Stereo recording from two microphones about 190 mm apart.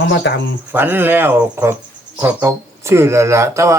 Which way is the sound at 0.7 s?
10° right (ahead or behind).